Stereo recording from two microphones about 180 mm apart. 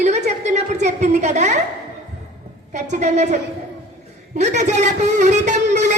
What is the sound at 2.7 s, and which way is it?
A woman's voice, 40° right (ahead or behind).